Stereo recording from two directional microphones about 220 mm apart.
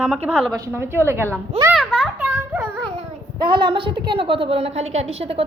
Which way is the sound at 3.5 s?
20° right (ahead or behind).